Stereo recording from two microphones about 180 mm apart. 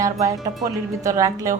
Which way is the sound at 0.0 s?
20° right (ahead or behind).